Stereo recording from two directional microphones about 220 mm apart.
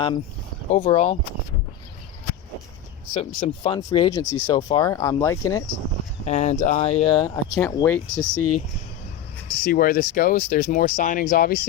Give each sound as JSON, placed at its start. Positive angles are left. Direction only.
{"t": 0.7, "sound": "speech", "side_deg": 30}
{"t": 3.2, "sound": "speech", "side_deg": 25}
{"t": 6.2, "sound": "speech", "side_deg": 30}
{"t": 8.4, "sound": "speech", "side_deg": 90}
{"t": 9.6, "sound": "speech", "side_deg": 40}